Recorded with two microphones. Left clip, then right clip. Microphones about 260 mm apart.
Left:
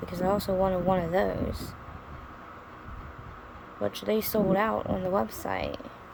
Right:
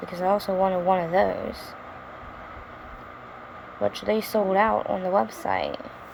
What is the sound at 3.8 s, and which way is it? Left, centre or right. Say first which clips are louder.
Speech: right 4 dB; centre.